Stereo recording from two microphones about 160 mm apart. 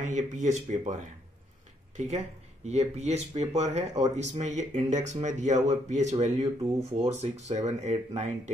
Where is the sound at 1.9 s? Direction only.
45° right (ahead or behind).